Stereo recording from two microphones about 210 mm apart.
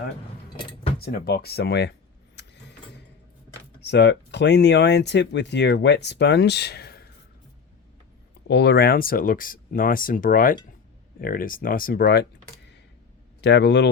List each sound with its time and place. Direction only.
1.0 s speech: 50° left (ahead or behind)
2.3 s keys jangling: 55° left (ahead or behind)
3.8 s speech: 55° left (ahead or behind)
8.4 s speech: 55° left (ahead or behind)
13.4 s speech: 55° left (ahead or behind)